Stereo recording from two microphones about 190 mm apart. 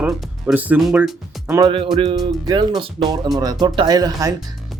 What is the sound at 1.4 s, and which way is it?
Speech, 15° right (ahead or behind).